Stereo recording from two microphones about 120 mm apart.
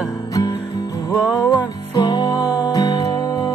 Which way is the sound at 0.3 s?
35° left (ahead or behind).